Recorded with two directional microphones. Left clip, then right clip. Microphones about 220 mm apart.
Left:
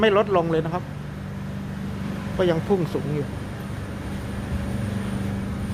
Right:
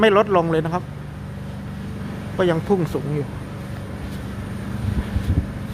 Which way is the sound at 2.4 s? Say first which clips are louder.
Right 2 dB; 20° right (ahead or behind).